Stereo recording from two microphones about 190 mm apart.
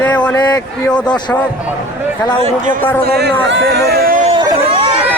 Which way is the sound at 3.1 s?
60° right (ahead or behind).